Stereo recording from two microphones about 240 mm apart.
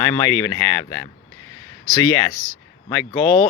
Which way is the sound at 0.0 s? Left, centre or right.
Centre.